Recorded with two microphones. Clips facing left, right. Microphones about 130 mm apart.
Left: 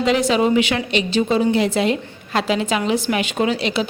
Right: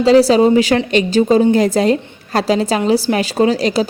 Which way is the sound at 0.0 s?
35° right (ahead or behind).